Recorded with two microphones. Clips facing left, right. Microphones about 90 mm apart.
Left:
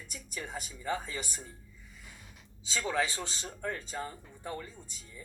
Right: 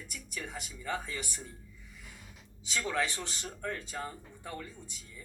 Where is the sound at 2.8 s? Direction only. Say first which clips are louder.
Left 1 dB; 20° left (ahead or behind).